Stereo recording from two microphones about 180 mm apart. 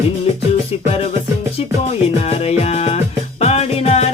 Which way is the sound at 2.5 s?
35° left (ahead or behind).